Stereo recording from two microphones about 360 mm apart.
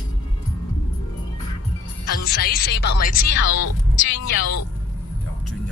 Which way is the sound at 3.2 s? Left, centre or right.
Left.